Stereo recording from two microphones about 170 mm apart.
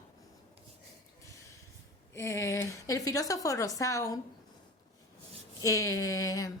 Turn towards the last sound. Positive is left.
turn(degrees=20)  # may be behind; listen again after turning